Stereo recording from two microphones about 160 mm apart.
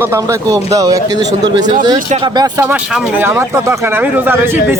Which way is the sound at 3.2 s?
15° right (ahead or behind).